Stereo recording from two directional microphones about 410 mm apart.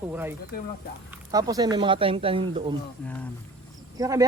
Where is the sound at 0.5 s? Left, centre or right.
Left.